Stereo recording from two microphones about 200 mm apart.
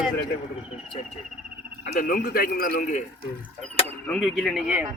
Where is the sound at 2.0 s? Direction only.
45° left (ahead or behind).